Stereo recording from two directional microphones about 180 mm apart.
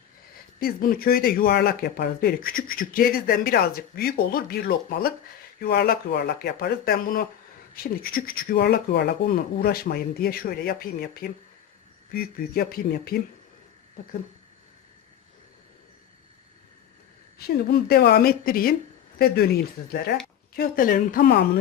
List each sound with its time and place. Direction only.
0.6 s speech: 55° left (ahead or behind)
17.3 s speech: 60° left (ahead or behind)